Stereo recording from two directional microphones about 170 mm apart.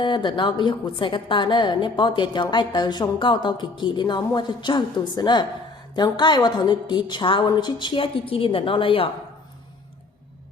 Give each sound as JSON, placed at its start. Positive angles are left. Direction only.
{"t": 0.0, "sound": "a woman's voice", "side_deg": 30}